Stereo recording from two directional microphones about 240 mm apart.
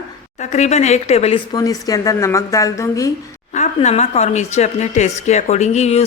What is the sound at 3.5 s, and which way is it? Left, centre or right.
A woman's voice, left.